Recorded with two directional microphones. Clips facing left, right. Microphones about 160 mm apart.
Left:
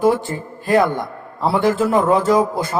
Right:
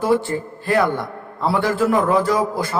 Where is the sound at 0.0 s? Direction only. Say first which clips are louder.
Left 1 dB; 15° left (ahead or behind).